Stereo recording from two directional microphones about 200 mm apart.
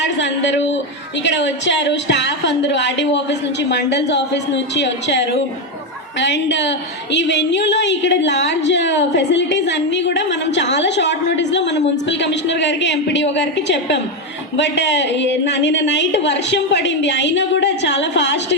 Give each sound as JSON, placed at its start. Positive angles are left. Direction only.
{"t": 0.0, "sound": "a man's voice", "side_deg": 65}